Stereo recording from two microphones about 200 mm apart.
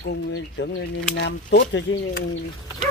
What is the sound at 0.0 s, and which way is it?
Speech, 55° left (ahead or behind).